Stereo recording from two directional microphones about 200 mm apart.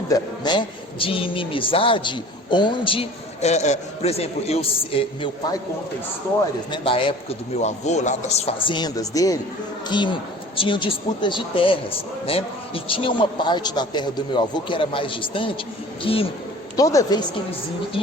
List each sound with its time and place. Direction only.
0.1 s a man's voice: 20° left (ahead or behind)
6.7 s a man's voice: 25° left (ahead or behind)
16.7 s speech: 15° left (ahead or behind)